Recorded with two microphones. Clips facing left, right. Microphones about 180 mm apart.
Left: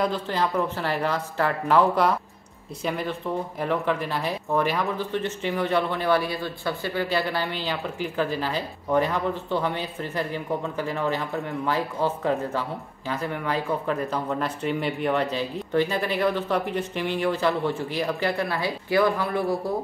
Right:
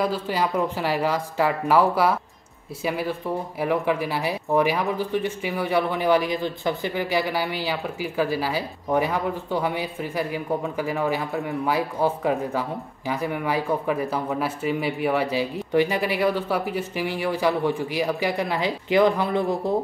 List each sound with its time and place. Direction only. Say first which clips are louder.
0.0 s speech: right 1 dB; 10° right (ahead or behind)